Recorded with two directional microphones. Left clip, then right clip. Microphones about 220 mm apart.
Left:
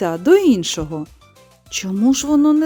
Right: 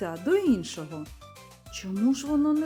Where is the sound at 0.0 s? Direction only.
45° left (ahead or behind).